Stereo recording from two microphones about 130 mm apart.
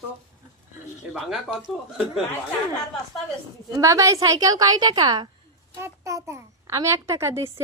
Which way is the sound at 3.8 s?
25° right (ahead or behind).